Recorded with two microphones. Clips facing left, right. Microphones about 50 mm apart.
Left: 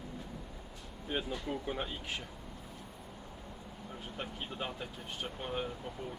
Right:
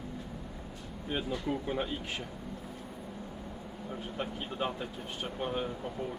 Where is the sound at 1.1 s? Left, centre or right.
Centre.